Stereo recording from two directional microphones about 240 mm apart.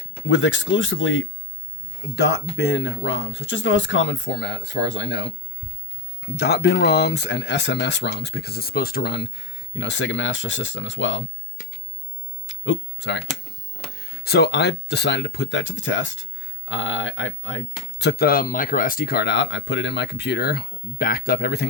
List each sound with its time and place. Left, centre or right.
0.3 s speech: left
12.5 s speech: left